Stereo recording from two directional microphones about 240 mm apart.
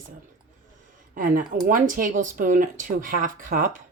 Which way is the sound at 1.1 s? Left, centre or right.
Right.